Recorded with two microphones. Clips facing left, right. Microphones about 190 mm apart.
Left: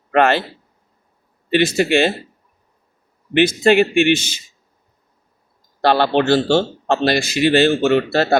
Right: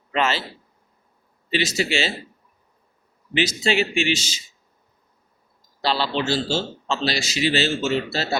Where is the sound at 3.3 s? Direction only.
55° left (ahead or behind).